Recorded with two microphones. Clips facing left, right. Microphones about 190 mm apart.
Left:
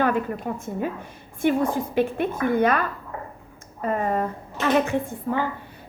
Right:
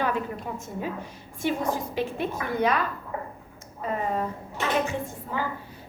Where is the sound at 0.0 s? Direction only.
55° left (ahead or behind).